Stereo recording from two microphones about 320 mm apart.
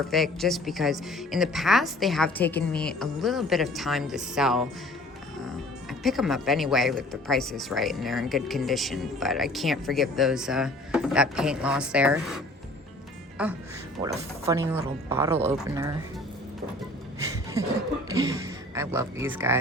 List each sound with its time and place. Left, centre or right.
0.1 s speech: centre
5.9 s speech: centre
13.4 s speech: centre
17.6 s speech: centre